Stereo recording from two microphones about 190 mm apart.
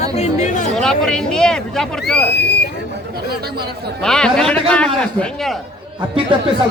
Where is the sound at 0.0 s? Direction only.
35° left (ahead or behind).